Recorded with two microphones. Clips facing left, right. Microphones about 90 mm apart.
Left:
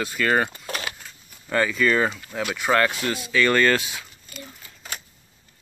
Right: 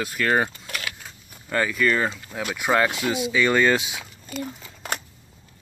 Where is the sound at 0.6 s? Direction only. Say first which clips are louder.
Left 2 dB; 30° left (ahead or behind).